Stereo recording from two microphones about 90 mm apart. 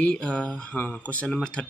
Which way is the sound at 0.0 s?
10° left (ahead or behind).